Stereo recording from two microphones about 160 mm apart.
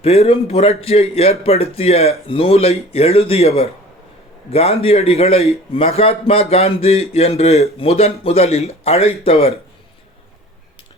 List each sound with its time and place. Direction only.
0.0 s a man's voice: 40° left (ahead or behind)